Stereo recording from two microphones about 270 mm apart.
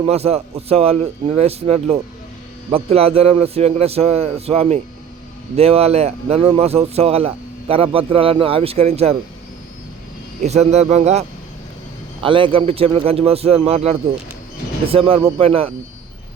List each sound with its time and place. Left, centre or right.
0.1 s speech: right
10.4 s speech: right